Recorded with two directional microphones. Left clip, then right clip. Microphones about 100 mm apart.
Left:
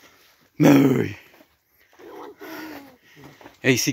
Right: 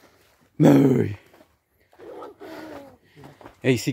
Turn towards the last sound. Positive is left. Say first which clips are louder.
# left 3 dB
turn(degrees=-10)  # may be behind; listen again after turning